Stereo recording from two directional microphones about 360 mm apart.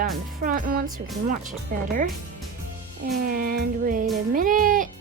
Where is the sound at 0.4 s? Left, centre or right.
Right.